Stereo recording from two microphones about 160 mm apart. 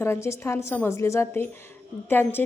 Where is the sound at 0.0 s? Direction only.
15° left (ahead or behind).